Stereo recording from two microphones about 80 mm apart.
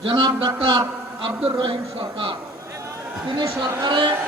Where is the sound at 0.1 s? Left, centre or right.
Right.